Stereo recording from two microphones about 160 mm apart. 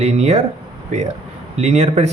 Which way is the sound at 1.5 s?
45° right (ahead or behind).